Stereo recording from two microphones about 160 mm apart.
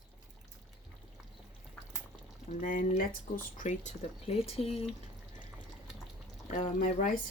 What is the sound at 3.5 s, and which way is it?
Speech, 45° left (ahead or behind).